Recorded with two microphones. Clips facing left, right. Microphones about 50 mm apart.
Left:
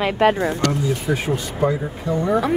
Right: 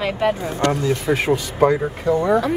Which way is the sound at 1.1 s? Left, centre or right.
Right.